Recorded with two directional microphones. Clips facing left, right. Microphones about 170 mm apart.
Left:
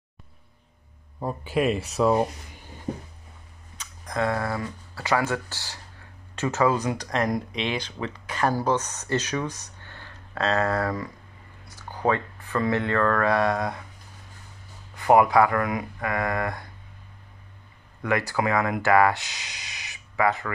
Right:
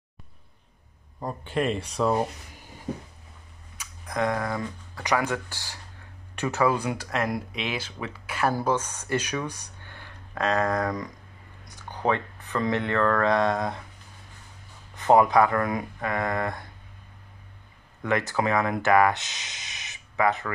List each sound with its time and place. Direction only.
1.2 s speech: 5° left (ahead or behind)
3.7 s speech: 10° right (ahead or behind)
9.5 s a sound: 15° right (ahead or behind)
12.1 s speech: 20° right (ahead or behind)
15.1 s speech: 20° right (ahead or behind)
18.0 s speech: 20° right (ahead or behind)